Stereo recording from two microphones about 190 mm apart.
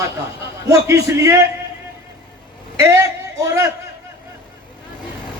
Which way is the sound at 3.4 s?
15° right (ahead or behind).